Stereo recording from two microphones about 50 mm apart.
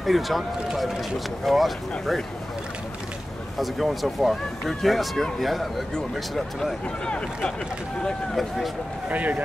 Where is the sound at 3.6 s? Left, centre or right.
Centre.